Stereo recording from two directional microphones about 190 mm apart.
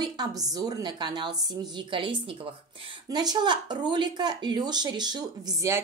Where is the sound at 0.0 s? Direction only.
20° right (ahead or behind).